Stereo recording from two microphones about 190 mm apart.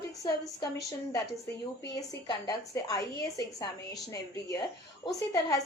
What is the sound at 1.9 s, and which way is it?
A woman's voice, 20° left (ahead or behind).